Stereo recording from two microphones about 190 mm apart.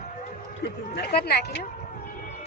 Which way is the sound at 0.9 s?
60° left (ahead or behind).